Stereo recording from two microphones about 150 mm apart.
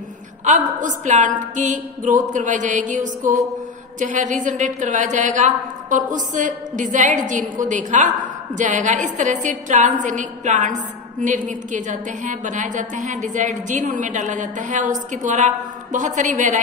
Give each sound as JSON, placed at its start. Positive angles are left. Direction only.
{"t": 0.5, "sound": "a woman's voice", "side_deg": -55}